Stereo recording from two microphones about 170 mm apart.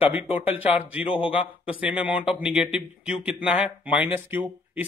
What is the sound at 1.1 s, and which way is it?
Speech, 30° left (ahead or behind).